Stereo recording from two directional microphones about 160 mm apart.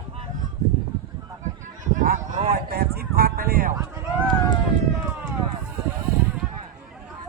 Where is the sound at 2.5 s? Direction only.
75° right (ahead or behind).